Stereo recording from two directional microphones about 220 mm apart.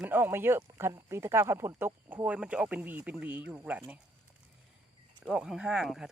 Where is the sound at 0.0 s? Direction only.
10° right (ahead or behind).